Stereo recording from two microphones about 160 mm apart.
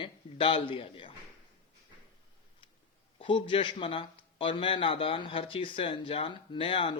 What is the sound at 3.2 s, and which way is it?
A man's voice, 35° left (ahead or behind).